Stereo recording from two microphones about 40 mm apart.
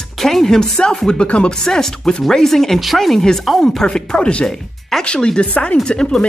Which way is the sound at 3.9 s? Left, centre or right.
Left.